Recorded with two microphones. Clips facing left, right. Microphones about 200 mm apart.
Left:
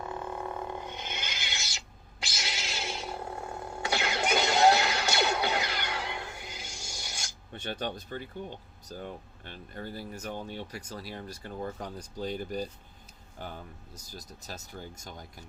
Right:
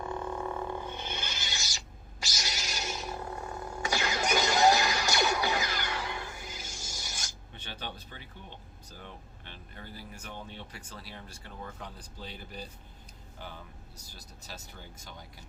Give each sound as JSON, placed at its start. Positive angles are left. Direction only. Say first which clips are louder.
{"t": 0.0, "sound": "a sound", "louder": "right 1 dB", "side_deg": 5}
{"t": 3.3, "sound": "music", "louder": "even", "side_deg": 25}
{"t": 7.5, "sound": "speech", "louder": "left 8 dB", "side_deg": 50}